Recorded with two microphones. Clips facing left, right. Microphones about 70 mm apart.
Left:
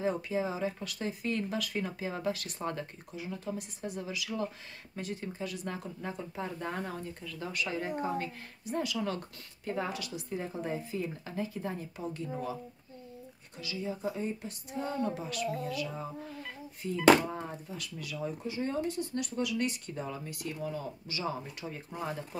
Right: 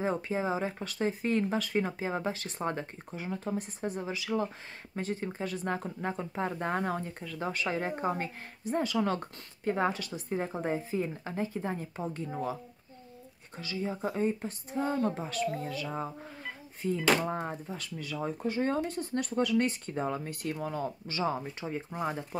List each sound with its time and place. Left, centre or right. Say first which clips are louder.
0.0 s speech: right 1 dB; right
13.6 s speech: right 3 dB; right
18.4 s speech: right 4 dB; right
21.4 s speech: right 5 dB; right